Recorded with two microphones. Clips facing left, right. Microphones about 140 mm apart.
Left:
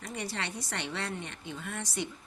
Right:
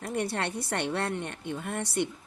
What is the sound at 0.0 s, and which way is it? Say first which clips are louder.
Speech: right 7 dB; 60° right (ahead or behind).